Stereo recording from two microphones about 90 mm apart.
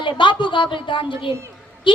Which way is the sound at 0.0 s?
65° left (ahead or behind).